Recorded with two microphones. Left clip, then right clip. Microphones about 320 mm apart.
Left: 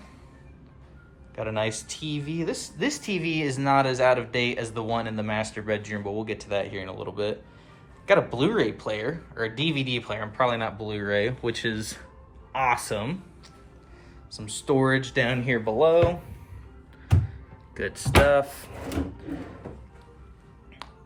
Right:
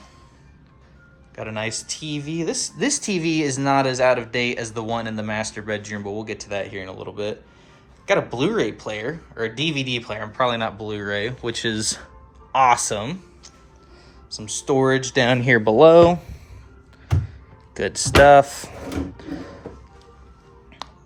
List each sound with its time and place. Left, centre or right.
1.4 s speech: centre; by 15.7 s right
17.7 s speech: centre
19.1 s a sound: centre
20.8 s music: centre